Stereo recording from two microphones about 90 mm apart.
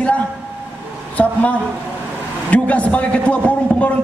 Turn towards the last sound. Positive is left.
turn(degrees=15)  # may be behind; listen again after turning